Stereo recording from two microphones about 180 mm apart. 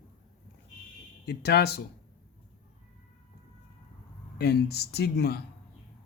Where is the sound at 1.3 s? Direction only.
65° left (ahead or behind).